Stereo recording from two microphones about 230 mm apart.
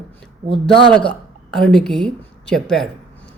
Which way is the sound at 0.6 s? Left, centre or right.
Centre.